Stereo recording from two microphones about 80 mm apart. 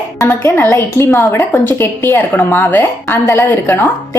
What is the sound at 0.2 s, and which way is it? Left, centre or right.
A woman's voice, left.